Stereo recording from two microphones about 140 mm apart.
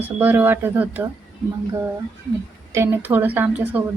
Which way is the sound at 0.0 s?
15° right (ahead or behind).